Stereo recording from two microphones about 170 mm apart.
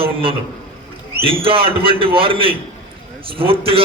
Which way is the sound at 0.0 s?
30° right (ahead or behind).